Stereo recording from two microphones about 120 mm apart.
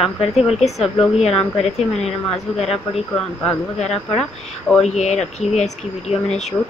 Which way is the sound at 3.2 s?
5° left (ahead or behind).